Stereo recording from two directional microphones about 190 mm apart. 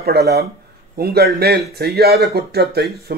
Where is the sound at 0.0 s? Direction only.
55° right (ahead or behind).